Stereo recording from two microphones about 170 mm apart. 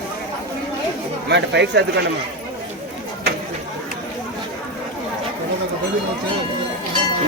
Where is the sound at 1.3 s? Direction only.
90° right.